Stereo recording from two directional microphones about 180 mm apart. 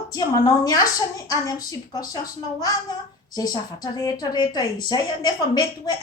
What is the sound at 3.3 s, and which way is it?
A woman's voice, 20° left (ahead or behind).